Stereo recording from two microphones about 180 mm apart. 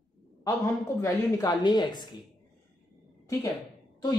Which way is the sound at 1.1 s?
20° left (ahead or behind).